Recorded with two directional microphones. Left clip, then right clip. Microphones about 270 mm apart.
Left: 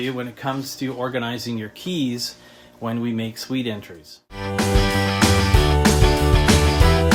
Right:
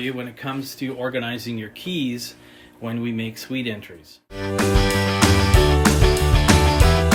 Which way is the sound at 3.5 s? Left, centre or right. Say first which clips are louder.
Left 1 dB; centre.